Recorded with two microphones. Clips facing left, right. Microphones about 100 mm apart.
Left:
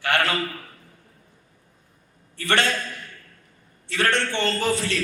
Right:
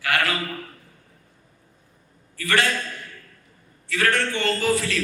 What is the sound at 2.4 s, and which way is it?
Speech, 25° left (ahead or behind).